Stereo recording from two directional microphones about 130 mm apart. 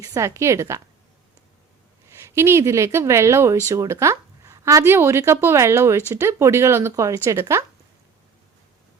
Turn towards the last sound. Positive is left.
turn(degrees=-20)  # may be behind; listen again after turning